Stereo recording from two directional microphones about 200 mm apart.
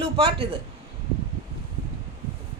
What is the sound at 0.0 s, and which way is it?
Speech, 25° right (ahead or behind).